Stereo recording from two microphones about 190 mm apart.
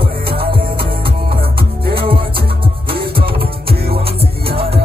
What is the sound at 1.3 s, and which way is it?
Music, 55° right (ahead or behind).